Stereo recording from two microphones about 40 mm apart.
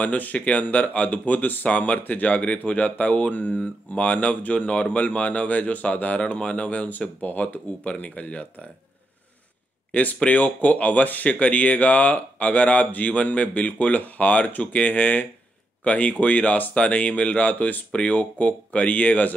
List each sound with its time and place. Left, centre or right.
0.0 s speech: left
3.9 s speech: left
10.2 s speech: left